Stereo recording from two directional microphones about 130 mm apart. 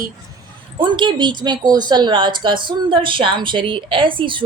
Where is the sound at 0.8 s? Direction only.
35° right (ahead or behind).